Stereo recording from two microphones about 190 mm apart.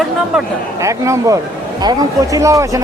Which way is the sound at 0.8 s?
15° right (ahead or behind).